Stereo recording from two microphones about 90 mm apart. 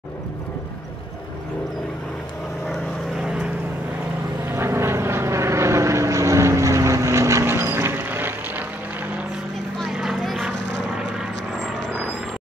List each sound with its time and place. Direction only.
3.2 s vehicle: 10° right (ahead or behind)
4.5 s vehicle: 30° right (ahead or behind)
9.8 s vehicle: centre (ahead or behind)